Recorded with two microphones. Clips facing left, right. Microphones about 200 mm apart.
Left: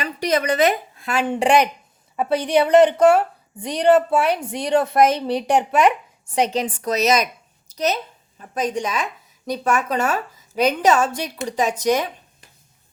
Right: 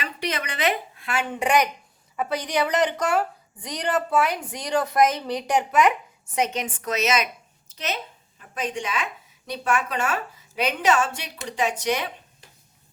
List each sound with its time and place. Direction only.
0.0 s a woman's voice: 40° left (ahead or behind)